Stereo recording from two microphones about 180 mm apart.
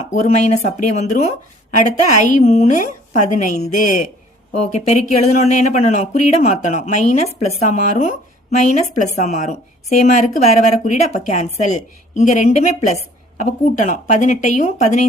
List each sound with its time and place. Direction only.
0.1 s a woman's voice: 40° left (ahead or behind)